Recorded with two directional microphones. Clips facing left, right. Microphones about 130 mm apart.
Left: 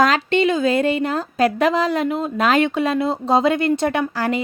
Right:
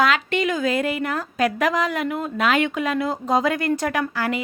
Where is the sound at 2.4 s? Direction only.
35° left (ahead or behind).